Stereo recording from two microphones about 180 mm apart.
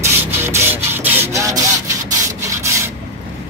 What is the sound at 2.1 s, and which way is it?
Wood, 15° right (ahead or behind).